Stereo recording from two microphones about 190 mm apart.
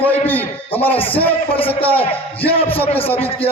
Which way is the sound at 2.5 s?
30° left (ahead or behind).